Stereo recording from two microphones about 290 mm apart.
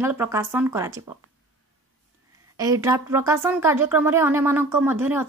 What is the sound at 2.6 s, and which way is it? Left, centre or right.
Speech, centre.